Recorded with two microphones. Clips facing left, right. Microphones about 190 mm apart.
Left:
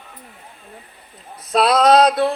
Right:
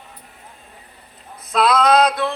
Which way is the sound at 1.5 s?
35° left (ahead or behind).